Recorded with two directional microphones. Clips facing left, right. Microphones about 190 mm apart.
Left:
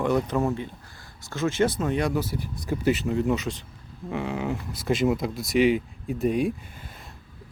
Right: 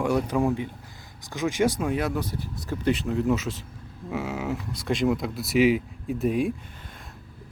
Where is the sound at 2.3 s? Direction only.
15° left (ahead or behind).